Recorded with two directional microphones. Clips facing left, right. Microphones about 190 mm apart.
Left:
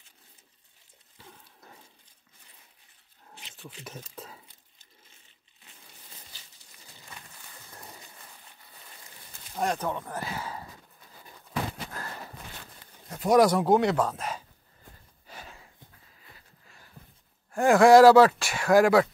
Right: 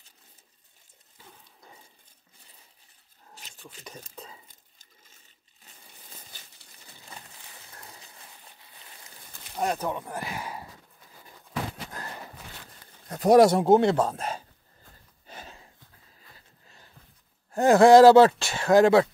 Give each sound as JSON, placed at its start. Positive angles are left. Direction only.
{"t": 3.3, "sound": "a sound", "side_deg": -40}
{"t": 3.8, "sound": "speech", "side_deg": 5}
{"t": 9.6, "sound": "speech", "side_deg": -10}
{"t": 13.1, "sound": "speech", "side_deg": -40}
{"t": 13.4, "sound": "speech", "side_deg": -25}
{"t": 15.2, "sound": "a sound", "side_deg": -25}
{"t": 17.5, "sound": "speech", "side_deg": -20}